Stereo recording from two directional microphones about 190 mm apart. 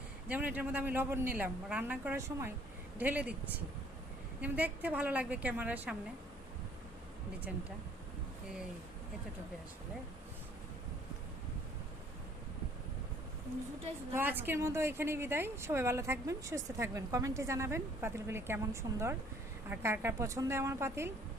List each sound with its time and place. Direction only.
0.3 s a woman's voice: 10° right (ahead or behind)
4.4 s a woman's voice: 10° right (ahead or behind)
14.1 s a woman's voice: 10° right (ahead or behind)